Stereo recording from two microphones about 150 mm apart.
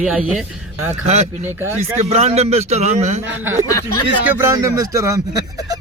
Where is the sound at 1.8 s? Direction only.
45° right (ahead or behind).